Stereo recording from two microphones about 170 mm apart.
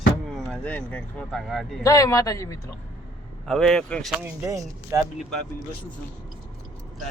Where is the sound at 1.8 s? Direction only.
20° left (ahead or behind).